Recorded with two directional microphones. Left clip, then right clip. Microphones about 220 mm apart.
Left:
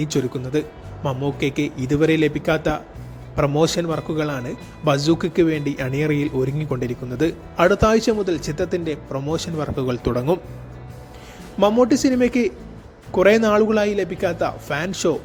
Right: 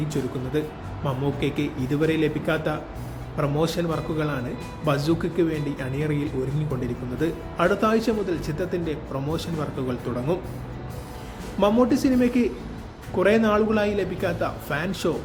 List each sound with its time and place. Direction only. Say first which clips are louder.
0.5 s speech: left 3 dB; 40° left (ahead or behind)
11.6 s speech: left 4 dB; 40° left (ahead or behind)